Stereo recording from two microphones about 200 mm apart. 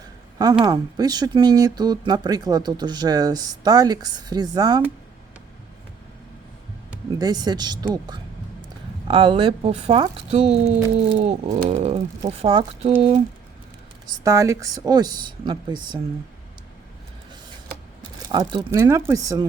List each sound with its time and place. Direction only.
0.6 s speech: 20° right (ahead or behind)
7.2 s speech: 20° right (ahead or behind)
9.0 s speech: 25° right (ahead or behind)
14.3 s speech: 15° right (ahead or behind)
18.3 s speech: 20° right (ahead or behind)